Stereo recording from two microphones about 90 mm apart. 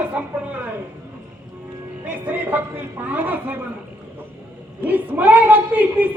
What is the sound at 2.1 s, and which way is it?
A woman's voice, 15° right (ahead or behind).